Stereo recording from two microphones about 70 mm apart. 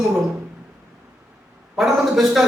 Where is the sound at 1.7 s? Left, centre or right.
Centre.